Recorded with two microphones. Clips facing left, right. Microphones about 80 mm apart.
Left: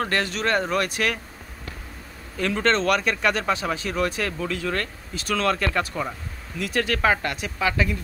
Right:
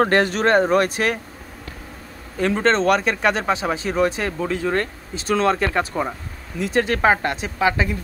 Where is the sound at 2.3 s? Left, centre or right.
Right.